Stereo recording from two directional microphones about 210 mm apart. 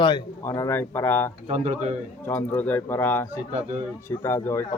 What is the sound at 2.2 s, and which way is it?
A man's voice, 10° left (ahead or behind).